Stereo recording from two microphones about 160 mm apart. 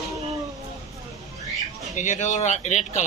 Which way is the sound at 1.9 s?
50° left (ahead or behind).